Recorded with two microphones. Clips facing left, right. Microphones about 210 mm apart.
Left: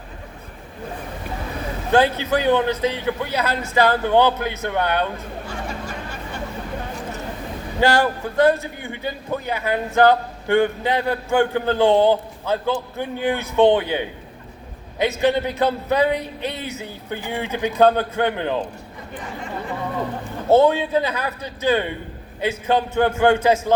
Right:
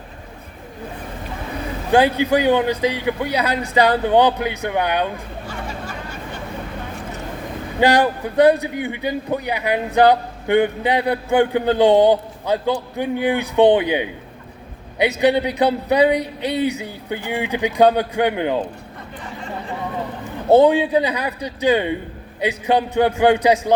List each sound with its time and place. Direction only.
1.9 s a man's voice: 15° right (ahead or behind)
7.8 s a man's voice: 15° right (ahead or behind)
20.5 s a man's voice: 15° right (ahead or behind)